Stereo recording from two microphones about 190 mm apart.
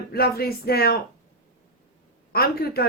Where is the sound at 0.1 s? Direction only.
55° left (ahead or behind).